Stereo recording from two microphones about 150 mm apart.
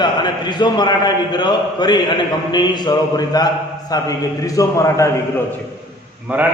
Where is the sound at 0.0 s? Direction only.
30° left (ahead or behind).